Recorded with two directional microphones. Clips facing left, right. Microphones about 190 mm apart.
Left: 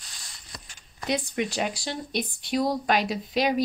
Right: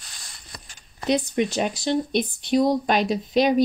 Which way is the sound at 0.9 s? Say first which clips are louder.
Right 6 dB; 25° right (ahead or behind).